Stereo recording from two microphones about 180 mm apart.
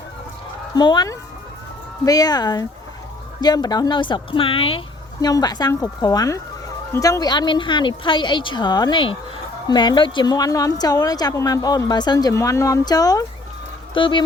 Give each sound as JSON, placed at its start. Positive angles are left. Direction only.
{"t": 0.8, "sound": "speech", "side_deg": 25}